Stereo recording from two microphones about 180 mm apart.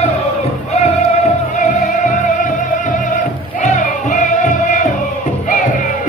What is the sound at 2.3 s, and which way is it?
Music, 45° left (ahead or behind).